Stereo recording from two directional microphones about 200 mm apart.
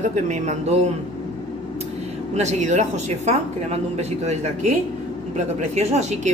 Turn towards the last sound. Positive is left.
turn(degrees=-35)  # may be behind; listen again after turning